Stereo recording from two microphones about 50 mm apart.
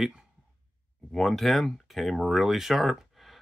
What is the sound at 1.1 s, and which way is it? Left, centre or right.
Speech, centre.